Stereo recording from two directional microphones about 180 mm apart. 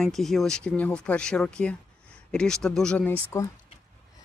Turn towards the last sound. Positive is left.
turn(degrees=15)  # may be behind; listen again after turning